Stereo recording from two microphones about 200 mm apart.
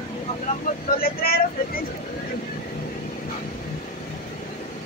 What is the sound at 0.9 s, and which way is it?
Speech, 50° left (ahead or behind).